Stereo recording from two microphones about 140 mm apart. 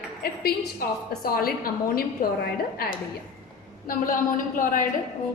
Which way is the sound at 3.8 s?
75° left (ahead or behind).